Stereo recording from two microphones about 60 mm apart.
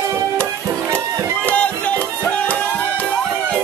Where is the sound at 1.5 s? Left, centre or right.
Left.